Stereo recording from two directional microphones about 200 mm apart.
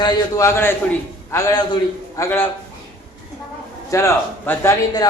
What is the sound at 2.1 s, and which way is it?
Speech, 10° left (ahead or behind).